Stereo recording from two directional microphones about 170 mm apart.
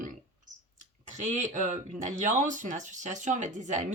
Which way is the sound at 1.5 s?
45° right (ahead or behind).